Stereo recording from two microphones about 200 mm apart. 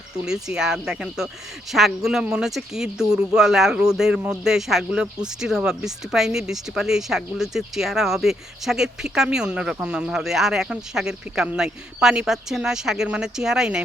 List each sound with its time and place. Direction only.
0.3 s speech: 5° right (ahead or behind)